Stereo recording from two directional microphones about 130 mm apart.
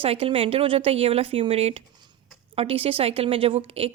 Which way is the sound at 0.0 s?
45° right (ahead or behind).